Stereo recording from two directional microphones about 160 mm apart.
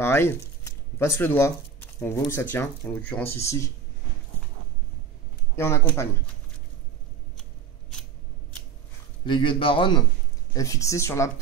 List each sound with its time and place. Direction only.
0.0 s speech: 15° left (ahead or behind)
5.6 s speech: 15° left (ahead or behind)
9.2 s a man's voice: 30° left (ahead or behind)
10.5 s speech: 20° left (ahead or behind)